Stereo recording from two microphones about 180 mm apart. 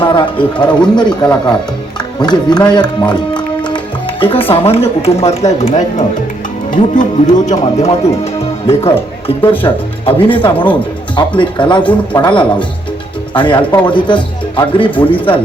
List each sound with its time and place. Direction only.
0.0 s speech: 25° left (ahead or behind)
11.8 s speech: 10° left (ahead or behind)
12.2 s speech: 25° left (ahead or behind)